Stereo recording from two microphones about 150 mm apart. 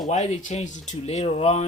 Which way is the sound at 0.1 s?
55° left (ahead or behind).